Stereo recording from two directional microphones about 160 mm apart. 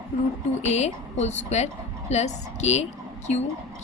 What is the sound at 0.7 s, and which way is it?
A woman's voice, 45° left (ahead or behind).